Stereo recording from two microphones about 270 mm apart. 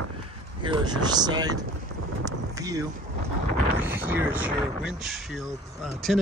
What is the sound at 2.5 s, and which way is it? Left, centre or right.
Vehicle, centre.